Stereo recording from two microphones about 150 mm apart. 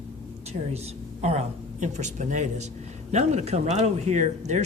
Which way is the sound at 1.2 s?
45° right (ahead or behind).